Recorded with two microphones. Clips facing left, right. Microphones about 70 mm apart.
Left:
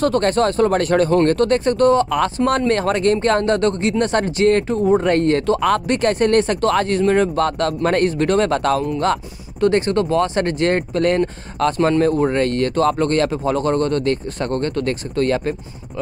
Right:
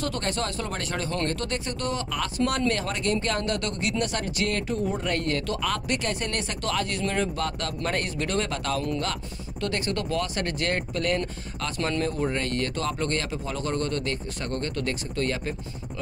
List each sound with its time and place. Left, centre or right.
0.0 s speech: left
5.6 s speech: left
9.6 s speech: left
12.0 s speech: left
12.4 s speech: left